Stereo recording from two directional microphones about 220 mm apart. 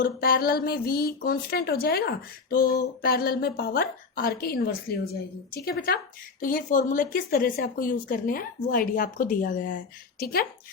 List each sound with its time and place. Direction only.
0.0 s speech: 45° left (ahead or behind)
6.4 s speech: 40° left (ahead or behind)